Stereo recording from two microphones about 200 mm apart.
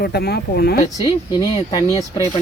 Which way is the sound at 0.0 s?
50° left (ahead or behind).